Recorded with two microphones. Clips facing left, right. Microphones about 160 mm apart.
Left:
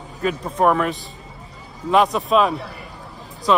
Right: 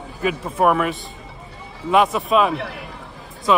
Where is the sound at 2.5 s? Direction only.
80° right.